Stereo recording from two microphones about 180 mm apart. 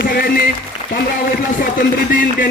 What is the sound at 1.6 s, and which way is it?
Speech, 50° left (ahead or behind).